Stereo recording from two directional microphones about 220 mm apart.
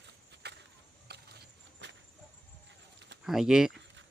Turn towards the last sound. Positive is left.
turn(degrees=0)  # may be behind; listen again after turning